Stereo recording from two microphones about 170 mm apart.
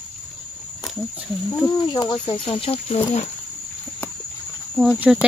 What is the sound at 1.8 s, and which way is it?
Speech, 25° left (ahead or behind).